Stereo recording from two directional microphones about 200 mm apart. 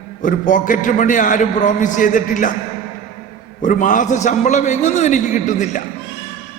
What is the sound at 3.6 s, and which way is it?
A man's voice, 40° left (ahead or behind).